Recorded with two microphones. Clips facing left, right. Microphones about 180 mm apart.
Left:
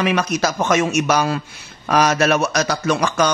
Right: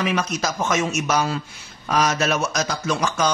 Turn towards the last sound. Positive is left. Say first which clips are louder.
# left 4 dB
turn(degrees=70)  # may be behind; listen again after turning